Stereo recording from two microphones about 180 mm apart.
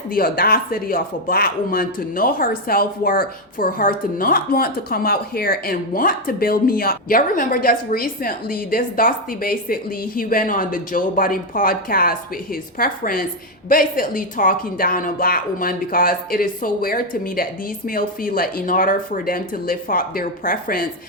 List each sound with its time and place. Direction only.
0.1 s speech: 55° left (ahead or behind)